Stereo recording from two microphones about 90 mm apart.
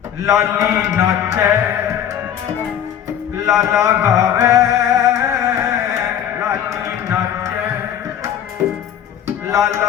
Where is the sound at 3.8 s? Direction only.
35° right (ahead or behind).